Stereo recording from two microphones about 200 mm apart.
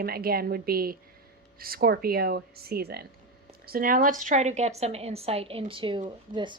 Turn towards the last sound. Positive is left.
turn(degrees=-25)  # may be behind; listen again after turning